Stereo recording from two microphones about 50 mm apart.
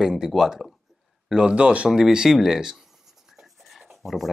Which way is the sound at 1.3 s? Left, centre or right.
Right.